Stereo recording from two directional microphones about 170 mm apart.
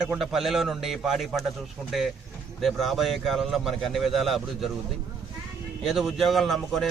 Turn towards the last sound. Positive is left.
turn(degrees=0)  # may be behind; listen again after turning